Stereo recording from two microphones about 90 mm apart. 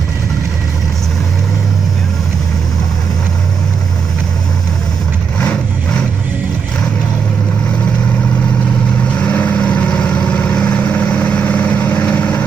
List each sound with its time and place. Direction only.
5.4 s vehicle: 10° left (ahead or behind)
9.1 s vehicle: 15° left (ahead or behind)